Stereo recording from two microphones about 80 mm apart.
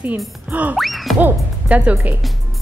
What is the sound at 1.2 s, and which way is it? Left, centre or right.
Speech, centre.